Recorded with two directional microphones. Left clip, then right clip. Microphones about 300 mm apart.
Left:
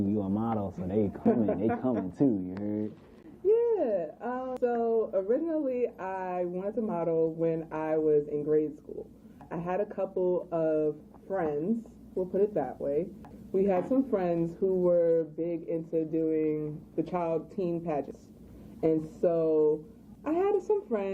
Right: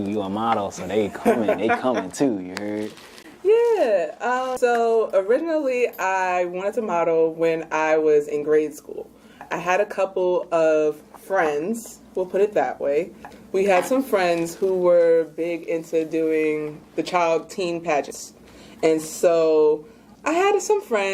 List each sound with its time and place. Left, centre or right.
0.0 s speech: centre
10.2 s speech: right
10.5 s speech: centre